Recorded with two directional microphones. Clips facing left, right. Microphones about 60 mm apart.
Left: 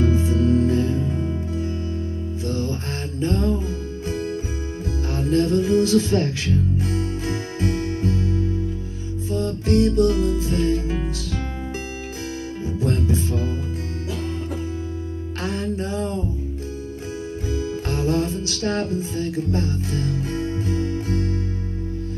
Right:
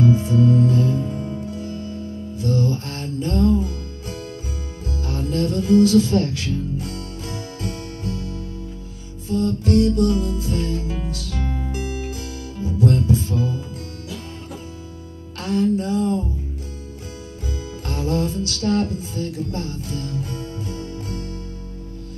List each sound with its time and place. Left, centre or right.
0.0 s music: left
2.4 s music: left
9.3 s music: left
15.4 s music: left
17.5 s music: left